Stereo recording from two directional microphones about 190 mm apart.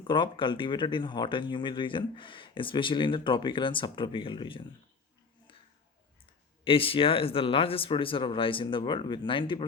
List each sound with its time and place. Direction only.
0.1 s speech: 25° left (ahead or behind)
6.7 s speech: 30° left (ahead or behind)